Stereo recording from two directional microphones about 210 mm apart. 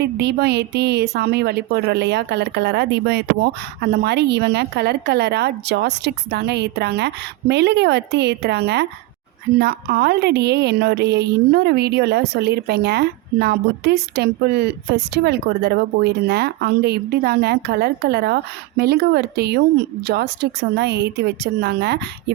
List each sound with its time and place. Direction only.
0.0 s a woman's voice: 50° right (ahead or behind)